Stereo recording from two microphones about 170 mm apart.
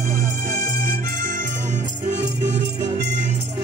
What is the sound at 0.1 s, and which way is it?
Music, 55° right (ahead or behind).